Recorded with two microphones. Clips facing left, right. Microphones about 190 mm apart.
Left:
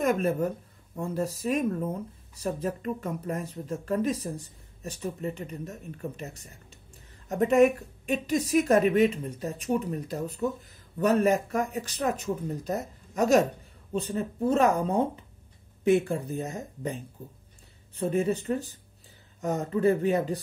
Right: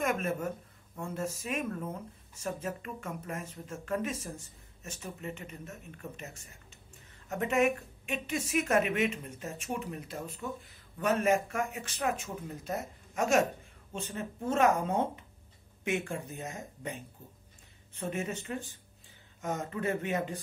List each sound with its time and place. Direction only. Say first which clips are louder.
0.0 s speech: left 6 dB; 35° left (ahead or behind)